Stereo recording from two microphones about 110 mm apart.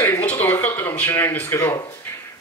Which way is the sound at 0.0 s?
15° left (ahead or behind).